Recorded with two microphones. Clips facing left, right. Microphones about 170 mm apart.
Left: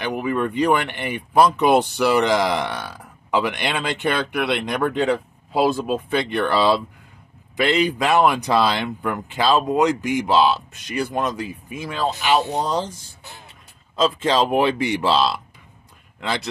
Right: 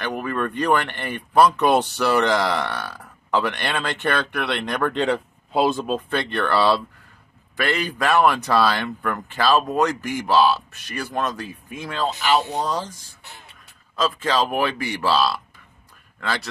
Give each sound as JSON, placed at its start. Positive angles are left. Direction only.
{"t": 0.0, "sound": "speech", "side_deg": 15}
{"t": 5.0, "sound": "speech", "side_deg": 0}
{"t": 12.6, "sound": "speech", "side_deg": 25}
{"t": 13.9, "sound": "speech", "side_deg": 25}